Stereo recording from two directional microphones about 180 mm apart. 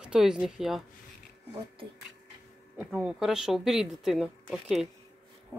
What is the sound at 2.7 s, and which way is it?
Speech, 5° right (ahead or behind).